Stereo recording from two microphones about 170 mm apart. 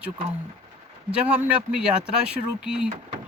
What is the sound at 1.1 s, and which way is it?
Speech, 5° right (ahead or behind).